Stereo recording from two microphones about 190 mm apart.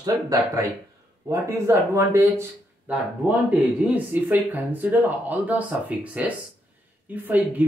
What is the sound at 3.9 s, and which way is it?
Speech, 10° right (ahead or behind).